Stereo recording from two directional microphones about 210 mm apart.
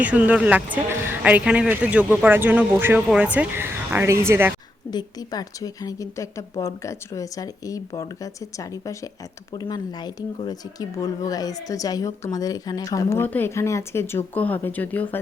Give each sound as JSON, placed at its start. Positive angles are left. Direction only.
{"t": 0.0, "sound": "a man's voice", "side_deg": -5}
{"t": 4.9, "sound": "speech", "side_deg": 20}